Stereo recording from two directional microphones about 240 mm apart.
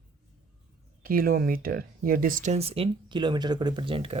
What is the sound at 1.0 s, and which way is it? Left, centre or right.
Speech, right.